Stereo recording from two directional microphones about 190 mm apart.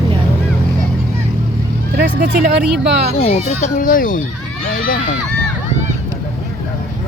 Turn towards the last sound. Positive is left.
turn(degrees=45)  # may be behind; listen again after turning